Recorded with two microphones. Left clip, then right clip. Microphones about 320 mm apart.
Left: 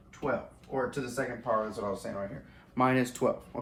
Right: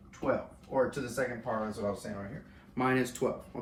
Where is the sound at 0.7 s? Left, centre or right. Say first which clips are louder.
Right 2 dB; centre.